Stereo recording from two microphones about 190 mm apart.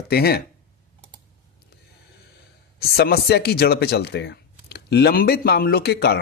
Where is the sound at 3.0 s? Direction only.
60° left (ahead or behind).